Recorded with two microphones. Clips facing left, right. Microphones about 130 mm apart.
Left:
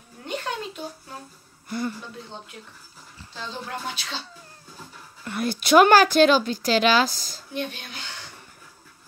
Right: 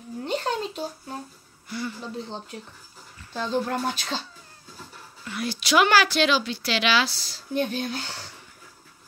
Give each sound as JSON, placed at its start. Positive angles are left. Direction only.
{"t": 0.2, "sound": "a sound", "side_deg": -30}
{"t": 1.7, "sound": "speech", "side_deg": 50}
{"t": 3.3, "sound": "speech", "side_deg": -45}
{"t": 5.2, "sound": "speech", "side_deg": 50}
{"t": 7.5, "sound": "speech", "side_deg": -40}